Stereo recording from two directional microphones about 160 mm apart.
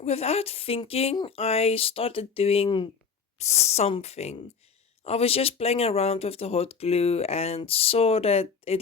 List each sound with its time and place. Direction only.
0.0 s speech: 40° left (ahead or behind)
3.3 s speech: 45° left (ahead or behind)